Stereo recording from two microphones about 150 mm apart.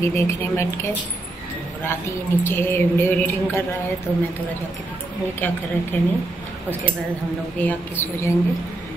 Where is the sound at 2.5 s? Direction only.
15° left (ahead or behind).